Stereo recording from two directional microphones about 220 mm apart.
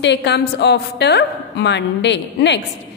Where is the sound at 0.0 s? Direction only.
50° left (ahead or behind).